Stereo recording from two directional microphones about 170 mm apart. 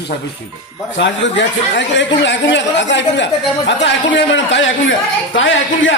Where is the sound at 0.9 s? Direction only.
90° left.